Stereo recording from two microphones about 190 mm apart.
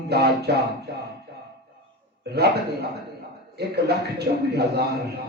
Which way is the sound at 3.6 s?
55° right (ahead or behind).